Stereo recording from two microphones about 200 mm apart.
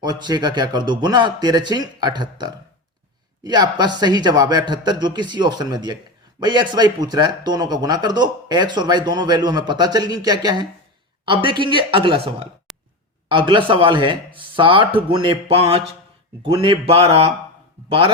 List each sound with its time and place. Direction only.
0.0 s a man's voice: 20° right (ahead or behind)
12.7 s a sound: centre (ahead or behind)
13.2 s a man's voice: 25° right (ahead or behind)